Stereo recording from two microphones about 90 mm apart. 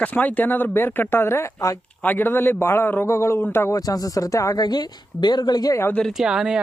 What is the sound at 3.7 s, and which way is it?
Speech, 40° left (ahead or behind).